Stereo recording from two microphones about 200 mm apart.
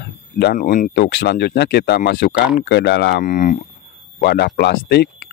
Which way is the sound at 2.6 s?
60° left (ahead or behind).